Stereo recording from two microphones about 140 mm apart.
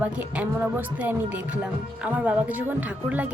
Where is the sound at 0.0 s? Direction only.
10° right (ahead or behind).